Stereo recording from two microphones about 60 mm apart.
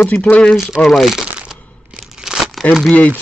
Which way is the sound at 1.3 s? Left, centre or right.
Centre.